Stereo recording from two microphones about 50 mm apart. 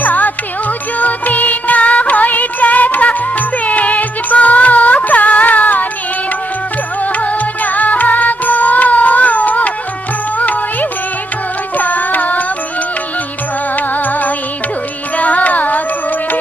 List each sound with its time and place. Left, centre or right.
0.0 s music: left
7.0 s music: left
13.7 s music: left